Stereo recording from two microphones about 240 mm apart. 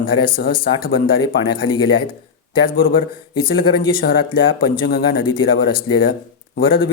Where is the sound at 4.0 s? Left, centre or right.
Left.